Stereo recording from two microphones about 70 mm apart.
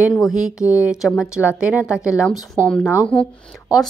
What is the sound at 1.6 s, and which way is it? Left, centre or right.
Speech, centre.